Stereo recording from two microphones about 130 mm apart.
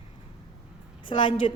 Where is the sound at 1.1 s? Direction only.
40° left (ahead or behind).